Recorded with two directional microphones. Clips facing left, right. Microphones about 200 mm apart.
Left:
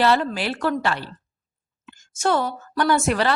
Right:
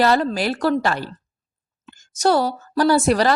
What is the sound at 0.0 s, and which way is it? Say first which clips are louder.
A woman's voice: right 2 dB; 40° right (ahead or behind).